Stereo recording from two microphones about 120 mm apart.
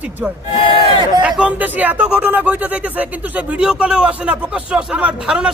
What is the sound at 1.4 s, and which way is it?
Speech, 10° right (ahead or behind).